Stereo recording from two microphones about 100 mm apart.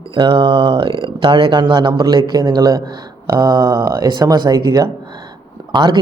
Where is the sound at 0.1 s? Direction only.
55° right (ahead or behind); by 4.9 s 40° right (ahead or behind).